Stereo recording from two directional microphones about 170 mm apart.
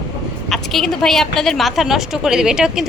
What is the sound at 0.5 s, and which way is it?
A woman's voice, centre (ahead or behind).